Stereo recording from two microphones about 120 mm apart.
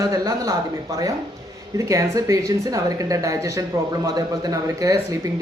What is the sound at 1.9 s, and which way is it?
A woman's voice, 30° right (ahead or behind).